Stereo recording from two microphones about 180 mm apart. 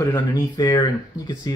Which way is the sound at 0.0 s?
20° left (ahead or behind).